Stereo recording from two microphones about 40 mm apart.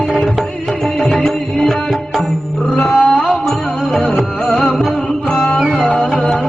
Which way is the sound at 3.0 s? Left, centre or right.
Left.